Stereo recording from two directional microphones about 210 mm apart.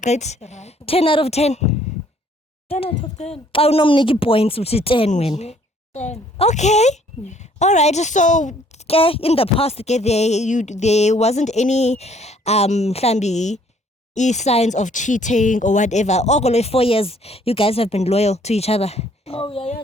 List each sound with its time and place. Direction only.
0.0 s speech: 35° left (ahead or behind)